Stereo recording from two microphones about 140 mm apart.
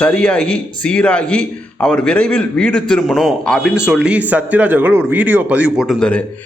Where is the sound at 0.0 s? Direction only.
10° left (ahead or behind).